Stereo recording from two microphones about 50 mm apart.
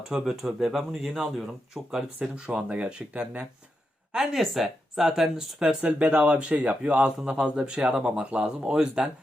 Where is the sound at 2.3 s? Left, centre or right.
Right.